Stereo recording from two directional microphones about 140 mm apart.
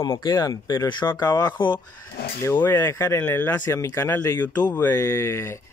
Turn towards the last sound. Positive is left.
turn(degrees=20)  # may be behind; listen again after turning